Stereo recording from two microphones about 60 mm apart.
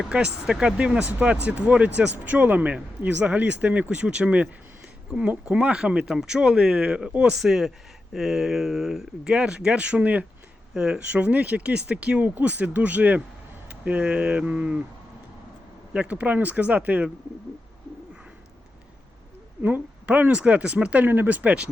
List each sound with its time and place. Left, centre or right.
0.1 s speech: centre
5.5 s speech: centre
7.3 s speech: centre; by 10.2 s right
10.8 s speech: centre
15.9 s speech: right
19.6 s speech: right
21.0 s speech: right